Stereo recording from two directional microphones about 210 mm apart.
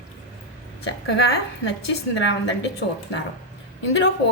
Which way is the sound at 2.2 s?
55° left (ahead or behind).